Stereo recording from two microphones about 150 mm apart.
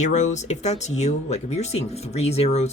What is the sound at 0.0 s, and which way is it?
Speech, 50° left (ahead or behind).